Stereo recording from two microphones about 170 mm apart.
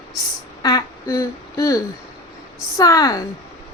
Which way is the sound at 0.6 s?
20° left (ahead or behind).